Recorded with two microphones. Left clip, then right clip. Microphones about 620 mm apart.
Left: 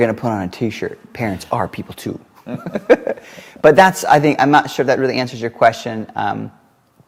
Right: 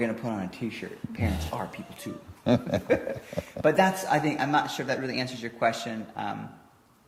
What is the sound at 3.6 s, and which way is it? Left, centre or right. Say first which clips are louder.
Speech: left 13 dB; left.